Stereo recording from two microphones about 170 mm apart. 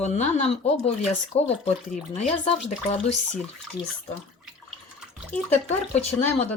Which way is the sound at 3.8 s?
25° left (ahead or behind).